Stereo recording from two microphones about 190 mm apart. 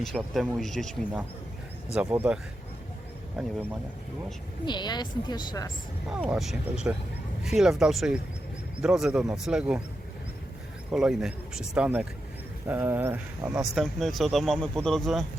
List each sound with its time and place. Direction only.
0.0 s speech: centre (ahead or behind)
2.0 s speech: 10° right (ahead or behind)
4.6 s speech: 25° left (ahead or behind)
6.1 s speech: 5° right (ahead or behind)
10.9 s speech: centre (ahead or behind)